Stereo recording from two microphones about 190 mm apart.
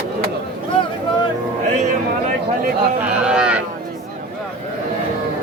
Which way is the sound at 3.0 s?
5° right (ahead or behind).